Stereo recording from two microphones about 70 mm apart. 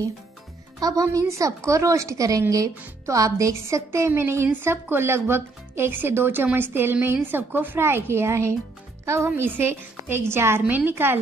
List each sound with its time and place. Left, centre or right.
0.7 s speech: right
1.0 s a woman's voice: right
9.3 s speech: right